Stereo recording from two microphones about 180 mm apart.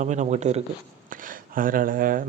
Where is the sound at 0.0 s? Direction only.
40° right (ahead or behind).